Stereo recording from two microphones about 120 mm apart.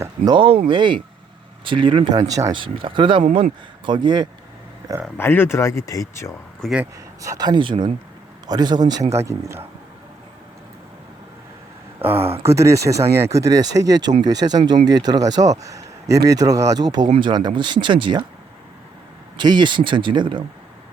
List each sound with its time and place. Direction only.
0.3 s speech: 45° right (ahead or behind)
2.1 s speech: 30° right (ahead or behind)
2.6 s speech: 45° right (ahead or behind)
5.1 s speech: 20° left (ahead or behind)
6.6 s speech: 5° left (ahead or behind)
7.2 s speech: 30° right (ahead or behind)
9.1 s speech: 25° right (ahead or behind)
11.9 s speech: 20° right (ahead or behind)
12.2 s speech: 55° right (ahead or behind)
12.5 s speech: 25° right (ahead or behind); by 18.2 s 40° right (ahead or behind)
19.4 s speech: 40° right (ahead or behind)